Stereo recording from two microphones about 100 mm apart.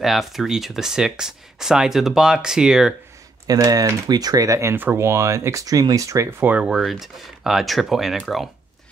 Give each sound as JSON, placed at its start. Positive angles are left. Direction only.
{"t": 0.0, "sound": "speech", "side_deg": 0}
{"t": 3.4, "sound": "speech", "side_deg": -40}
{"t": 6.5, "sound": "speech", "side_deg": -5}